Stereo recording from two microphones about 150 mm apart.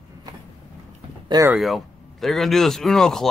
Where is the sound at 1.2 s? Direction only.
25° right (ahead or behind).